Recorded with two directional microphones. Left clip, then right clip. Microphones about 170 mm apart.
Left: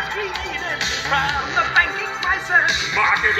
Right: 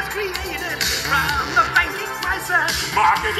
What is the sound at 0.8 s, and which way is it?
Music, 65° right (ahead or behind).